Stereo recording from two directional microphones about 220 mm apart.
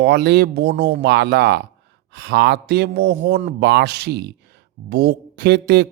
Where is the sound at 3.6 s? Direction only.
50° right (ahead or behind).